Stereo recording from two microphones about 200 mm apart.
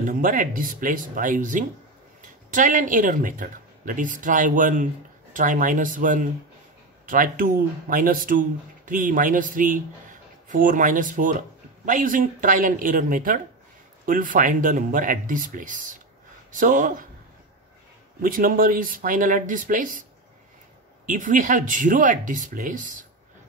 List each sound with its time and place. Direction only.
0.0 s speech: 40° right (ahead or behind)
18.2 s speech: 45° right (ahead or behind)